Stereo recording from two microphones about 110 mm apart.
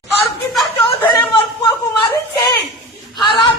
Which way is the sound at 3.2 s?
Centre (ahead or behind).